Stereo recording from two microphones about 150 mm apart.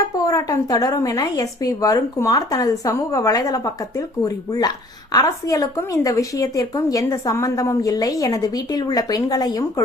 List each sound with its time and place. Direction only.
0.2 s a woman's voice: 25° left (ahead or behind)